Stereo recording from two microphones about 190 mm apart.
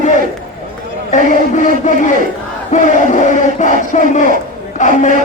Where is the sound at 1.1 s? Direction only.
40° left (ahead or behind).